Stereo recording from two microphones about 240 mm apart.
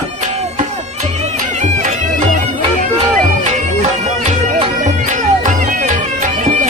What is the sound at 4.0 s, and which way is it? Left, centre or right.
Music, right.